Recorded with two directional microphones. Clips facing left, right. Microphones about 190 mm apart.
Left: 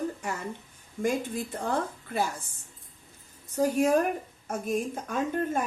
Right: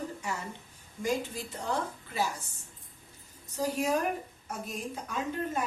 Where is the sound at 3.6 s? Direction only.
50° left (ahead or behind).